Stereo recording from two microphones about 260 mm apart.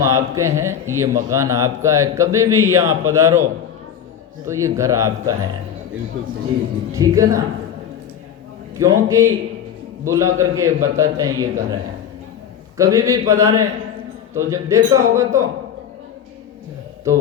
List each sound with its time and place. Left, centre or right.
0.0 s a man's voice: centre
4.4 s a man's voice: centre
6.2 s a man's voice: right
6.9 s a man's voice: centre
8.8 s a man's voice: centre